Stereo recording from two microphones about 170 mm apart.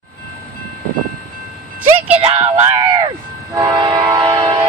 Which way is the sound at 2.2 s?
35° right (ahead or behind).